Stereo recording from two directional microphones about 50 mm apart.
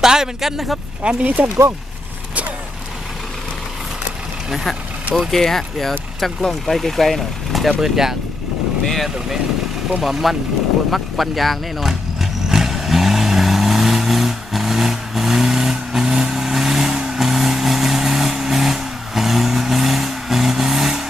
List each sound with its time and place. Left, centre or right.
0.0 s speech: centre
1.0 s speech: right
5.1 s speech: centre
8.8 s speech: centre
9.0 s speech: centre
10.9 s vehicle: centre